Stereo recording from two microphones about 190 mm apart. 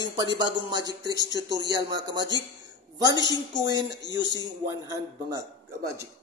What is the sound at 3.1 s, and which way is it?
Speech, 20° left (ahead or behind).